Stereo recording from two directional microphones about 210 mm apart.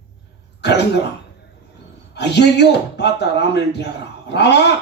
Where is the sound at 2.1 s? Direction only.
55° left (ahead or behind).